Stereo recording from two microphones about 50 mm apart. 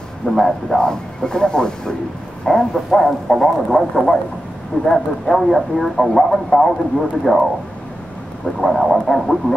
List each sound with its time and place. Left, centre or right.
0.3 s speech: centre
8.5 s speech: centre